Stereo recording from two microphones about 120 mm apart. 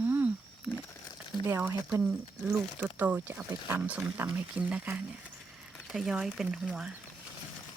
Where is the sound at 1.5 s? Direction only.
25° right (ahead or behind); by 6.6 s 5° right (ahead or behind).